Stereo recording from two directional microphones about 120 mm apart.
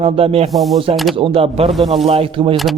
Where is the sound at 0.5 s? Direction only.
Centre (ahead or behind).